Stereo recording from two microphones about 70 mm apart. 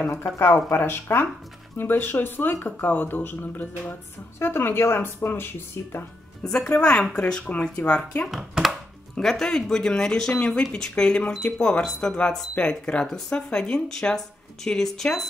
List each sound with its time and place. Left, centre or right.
0.1 s speech: left
6.7 s speech: centre
8.3 s speech: centre
9.1 s speech: centre